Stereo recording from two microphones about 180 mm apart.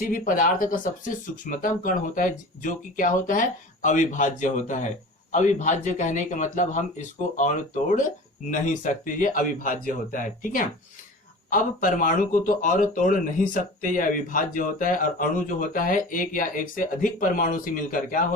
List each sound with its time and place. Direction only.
0.0 s a man's voice: 50° left (ahead or behind)